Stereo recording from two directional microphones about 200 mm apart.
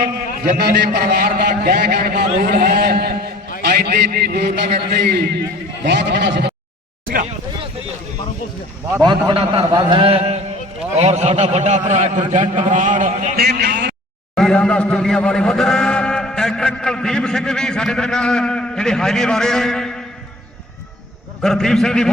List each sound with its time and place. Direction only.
0.0 s a man's voice: 50° right (ahead or behind)
9.0 s a man's voice: 25° right (ahead or behind); by 13.5 s 45° right (ahead or behind)
13.6 s speech: 55° right (ahead or behind)
14.3 s a man's voice: 5° left (ahead or behind)
21.4 s a man's voice: 5° left (ahead or behind)